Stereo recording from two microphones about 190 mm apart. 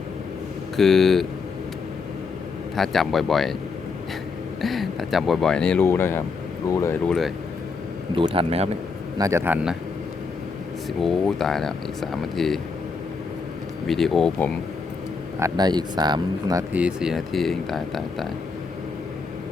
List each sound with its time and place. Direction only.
0.8 s speech: centre (ahead or behind)
2.7 s speech: centre (ahead or behind)
4.6 s speech: centre (ahead or behind); by 7.0 s 15° left (ahead or behind)
7.1 s speech: centre (ahead or behind)
8.1 s speech: 25° right (ahead or behind)
9.1 s a man's voice: 15° right (ahead or behind)
11.0 s speech: centre (ahead or behind)
13.8 s speech: centre (ahead or behind)
15.4 s speech: 20° right (ahead or behind)
16.7 s speech: 5° right (ahead or behind)